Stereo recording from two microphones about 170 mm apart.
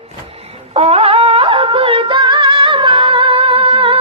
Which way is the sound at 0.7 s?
35° right (ahead or behind).